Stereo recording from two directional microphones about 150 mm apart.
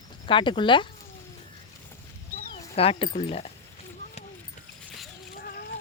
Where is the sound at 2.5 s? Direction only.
40° left (ahead or behind).